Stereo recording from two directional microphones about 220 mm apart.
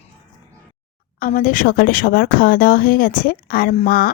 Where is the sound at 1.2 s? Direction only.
40° left (ahead or behind).